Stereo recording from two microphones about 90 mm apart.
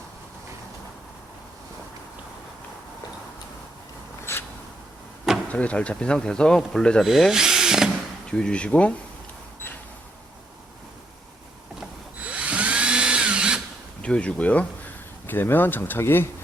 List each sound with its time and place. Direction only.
4.3 s a sound: 30° left (ahead or behind)
5.5 s speech: 15° left (ahead or behind)
7.0 s speech: 5° right (ahead or behind)
8.3 s speech: 10° left (ahead or behind)
12.2 s drill: 15° right (ahead or behind)
14.0 s speech: 15° left (ahead or behind)